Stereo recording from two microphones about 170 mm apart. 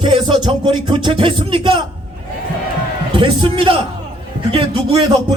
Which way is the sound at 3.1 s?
30° right (ahead or behind).